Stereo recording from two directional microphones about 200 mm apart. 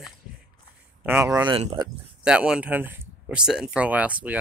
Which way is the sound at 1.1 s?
10° right (ahead or behind).